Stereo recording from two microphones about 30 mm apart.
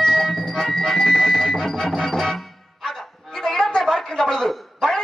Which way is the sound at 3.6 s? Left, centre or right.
Left.